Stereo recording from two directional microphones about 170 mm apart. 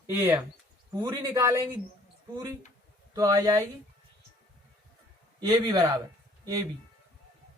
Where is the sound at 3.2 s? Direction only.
20° right (ahead or behind).